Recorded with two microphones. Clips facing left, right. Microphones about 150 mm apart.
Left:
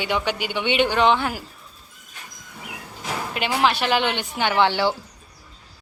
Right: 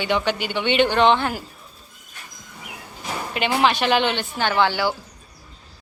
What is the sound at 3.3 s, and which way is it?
Speech, centre (ahead or behind).